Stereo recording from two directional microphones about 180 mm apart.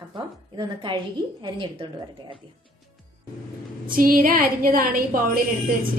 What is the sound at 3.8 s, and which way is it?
A woman's voice, 50° right (ahead or behind).